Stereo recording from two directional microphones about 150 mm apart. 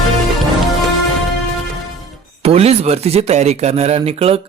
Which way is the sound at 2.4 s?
40° right (ahead or behind).